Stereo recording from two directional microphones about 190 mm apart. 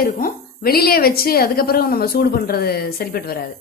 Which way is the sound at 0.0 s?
50° left (ahead or behind).